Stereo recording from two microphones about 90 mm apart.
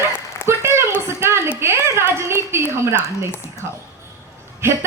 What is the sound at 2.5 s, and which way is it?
Speech, 30° right (ahead or behind).